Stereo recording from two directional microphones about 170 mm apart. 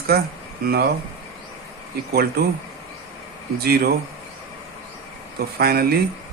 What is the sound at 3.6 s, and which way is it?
Speech, 65° right (ahead or behind).